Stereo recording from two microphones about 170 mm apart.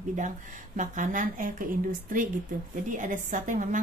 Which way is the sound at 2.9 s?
50° right (ahead or behind).